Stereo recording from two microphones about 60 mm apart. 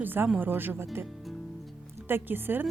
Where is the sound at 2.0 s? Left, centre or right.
Right.